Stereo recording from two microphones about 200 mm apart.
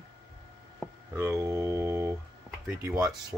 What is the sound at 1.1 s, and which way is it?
Speech, 15° right (ahead or behind).